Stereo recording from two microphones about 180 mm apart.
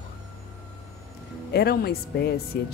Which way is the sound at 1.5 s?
60° left (ahead or behind).